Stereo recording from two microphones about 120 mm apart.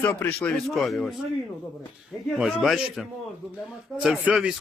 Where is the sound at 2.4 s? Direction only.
5° right (ahead or behind).